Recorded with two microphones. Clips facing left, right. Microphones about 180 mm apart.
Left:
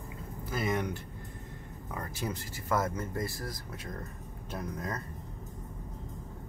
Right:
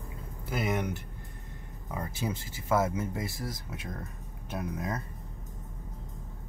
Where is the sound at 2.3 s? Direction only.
25° right (ahead or behind).